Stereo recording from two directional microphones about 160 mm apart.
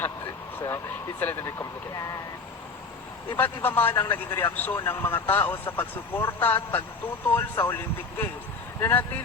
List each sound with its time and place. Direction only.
1.2 s a man's voice: 15° left (ahead or behind)
3.2 s a man's voice: 10° left (ahead or behind)
8.8 s a man's voice: 10° left (ahead or behind)